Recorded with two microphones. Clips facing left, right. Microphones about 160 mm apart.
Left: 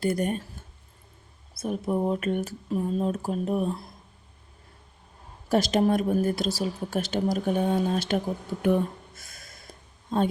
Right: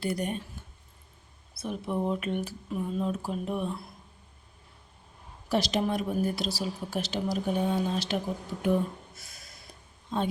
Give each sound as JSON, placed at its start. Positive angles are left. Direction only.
{"t": 0.0, "sound": "a woman's voice", "side_deg": 50}
{"t": 1.5, "sound": "a woman's voice", "side_deg": 45}
{"t": 5.5, "sound": "a woman's voice", "side_deg": 50}
{"t": 9.1, "sound": "a sound", "side_deg": 50}